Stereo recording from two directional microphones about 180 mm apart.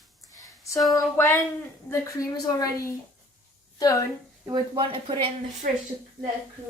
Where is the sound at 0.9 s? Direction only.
15° left (ahead or behind).